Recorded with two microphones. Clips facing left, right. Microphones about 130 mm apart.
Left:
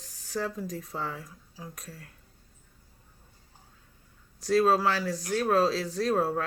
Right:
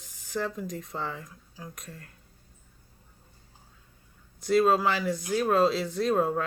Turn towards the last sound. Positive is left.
turn(degrees=0)  # may be behind; listen again after turning